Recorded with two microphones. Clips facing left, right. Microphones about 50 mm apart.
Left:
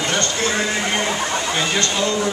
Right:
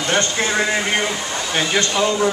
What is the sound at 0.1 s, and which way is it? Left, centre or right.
Speech, right.